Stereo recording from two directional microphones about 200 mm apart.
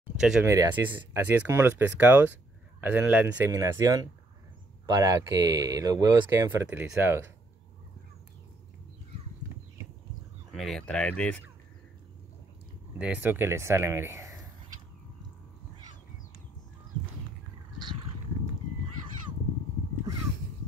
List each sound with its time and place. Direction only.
0.2 s speech: 5° right (ahead or behind)
0.5 s speech: 15° right (ahead or behind)
10.5 s speech: centre (ahead or behind)
13.0 s speech: 10° right (ahead or behind)